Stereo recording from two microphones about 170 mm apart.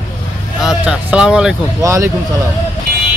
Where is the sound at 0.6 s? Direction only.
5° right (ahead or behind).